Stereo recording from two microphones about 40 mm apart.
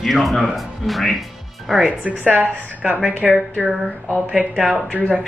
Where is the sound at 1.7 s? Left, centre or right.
Centre.